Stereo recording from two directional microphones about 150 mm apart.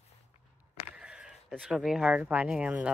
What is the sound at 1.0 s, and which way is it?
Speech, 5° right (ahead or behind).